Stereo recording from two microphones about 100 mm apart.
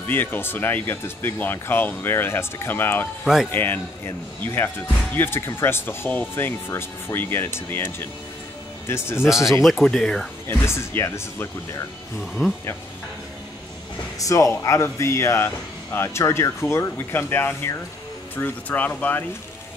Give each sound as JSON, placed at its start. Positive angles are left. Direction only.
{"t": 0.0, "sound": "speech", "side_deg": 20}
{"t": 9.2, "sound": "speech", "side_deg": -5}
{"t": 10.5, "sound": "speech", "side_deg": 25}
{"t": 14.2, "sound": "speech", "side_deg": 30}